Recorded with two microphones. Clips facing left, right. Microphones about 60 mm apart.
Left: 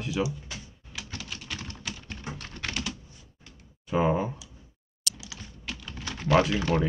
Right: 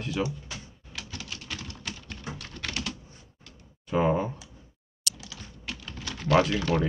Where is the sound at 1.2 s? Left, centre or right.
Centre.